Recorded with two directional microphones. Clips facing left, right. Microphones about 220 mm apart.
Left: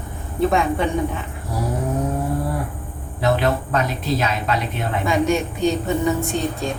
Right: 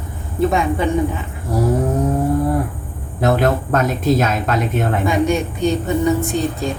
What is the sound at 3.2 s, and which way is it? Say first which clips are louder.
Speech: right 3 dB; 50° right (ahead or behind).